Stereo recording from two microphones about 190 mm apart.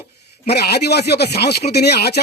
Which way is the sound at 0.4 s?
55° left (ahead or behind).